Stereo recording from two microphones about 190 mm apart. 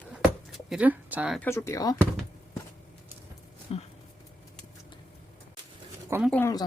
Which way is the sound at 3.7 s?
30° left (ahead or behind).